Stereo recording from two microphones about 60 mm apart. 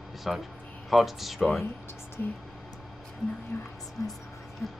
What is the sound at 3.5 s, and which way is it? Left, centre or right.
Speech, left.